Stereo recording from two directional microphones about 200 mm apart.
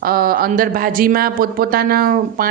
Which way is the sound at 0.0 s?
45° right (ahead or behind).